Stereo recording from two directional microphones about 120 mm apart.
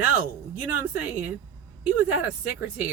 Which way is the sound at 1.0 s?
10° right (ahead or behind).